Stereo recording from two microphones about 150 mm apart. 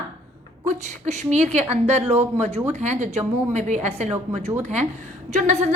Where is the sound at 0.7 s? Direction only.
50° right (ahead or behind).